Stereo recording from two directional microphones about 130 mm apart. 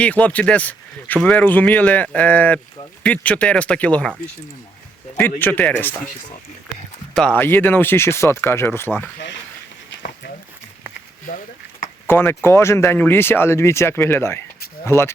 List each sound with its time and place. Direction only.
0.0 s speech: 10° left (ahead or behind)
5.5 s speech: 15° left (ahead or behind)
7.3 s speech: 15° left (ahead or behind)
12.0 s speech: 15° left (ahead or behind)